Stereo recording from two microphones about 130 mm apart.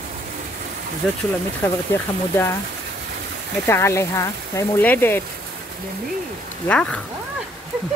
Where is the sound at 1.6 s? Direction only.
15° left (ahead or behind).